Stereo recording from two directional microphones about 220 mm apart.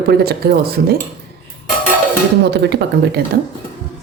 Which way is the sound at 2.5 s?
50° right (ahead or behind).